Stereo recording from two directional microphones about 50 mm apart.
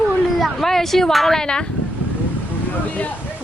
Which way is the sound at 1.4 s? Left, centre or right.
Centre.